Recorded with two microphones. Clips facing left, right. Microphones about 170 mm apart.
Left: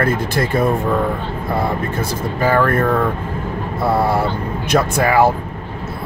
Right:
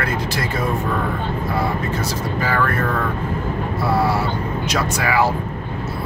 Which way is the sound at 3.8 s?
50° left (ahead or behind).